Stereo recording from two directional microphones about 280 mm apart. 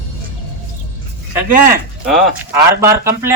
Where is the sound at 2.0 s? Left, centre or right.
Centre.